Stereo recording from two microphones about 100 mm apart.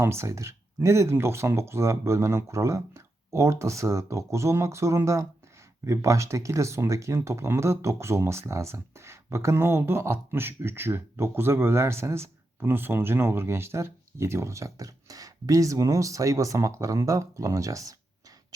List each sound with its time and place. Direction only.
0.0 s speech: 25° right (ahead or behind)